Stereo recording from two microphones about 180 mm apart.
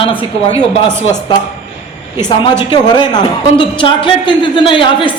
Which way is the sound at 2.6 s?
25° left (ahead or behind).